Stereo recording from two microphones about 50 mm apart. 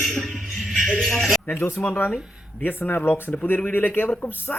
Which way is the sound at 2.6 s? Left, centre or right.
Left.